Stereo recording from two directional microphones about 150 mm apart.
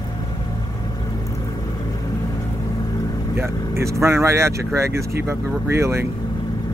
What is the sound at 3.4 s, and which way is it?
Speech, 20° right (ahead or behind).